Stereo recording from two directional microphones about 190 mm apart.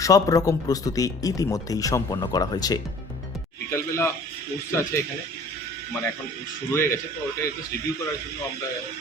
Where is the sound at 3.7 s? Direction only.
15° left (ahead or behind).